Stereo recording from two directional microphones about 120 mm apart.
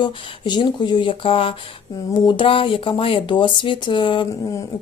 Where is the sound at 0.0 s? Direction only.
45° left (ahead or behind).